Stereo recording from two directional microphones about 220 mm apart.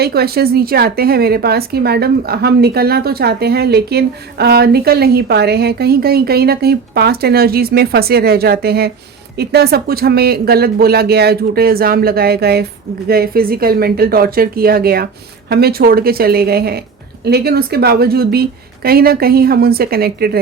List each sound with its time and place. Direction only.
0.0 s a woman's voice: 45° right (ahead or behind)